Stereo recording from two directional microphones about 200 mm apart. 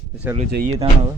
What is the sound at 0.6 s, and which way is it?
Speech, 30° right (ahead or behind).